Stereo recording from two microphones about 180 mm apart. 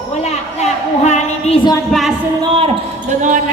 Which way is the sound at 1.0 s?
40° left (ahead or behind).